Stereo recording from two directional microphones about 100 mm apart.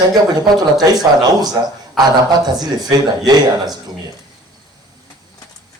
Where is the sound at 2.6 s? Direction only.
40° right (ahead or behind).